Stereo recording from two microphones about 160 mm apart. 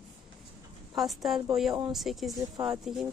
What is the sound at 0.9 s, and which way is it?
Speech, centre (ahead or behind).